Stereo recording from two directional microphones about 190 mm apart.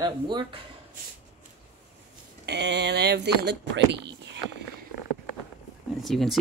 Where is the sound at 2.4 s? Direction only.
65° right (ahead or behind).